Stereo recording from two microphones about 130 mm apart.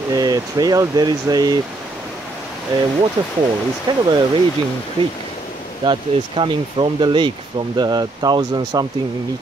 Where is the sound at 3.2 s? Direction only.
35° right (ahead or behind).